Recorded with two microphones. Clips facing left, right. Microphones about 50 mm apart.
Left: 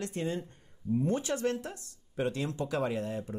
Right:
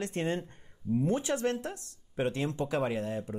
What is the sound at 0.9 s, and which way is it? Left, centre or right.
Speech, centre.